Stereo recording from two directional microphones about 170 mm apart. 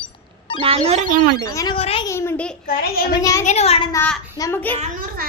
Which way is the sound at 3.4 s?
40° left (ahead or behind).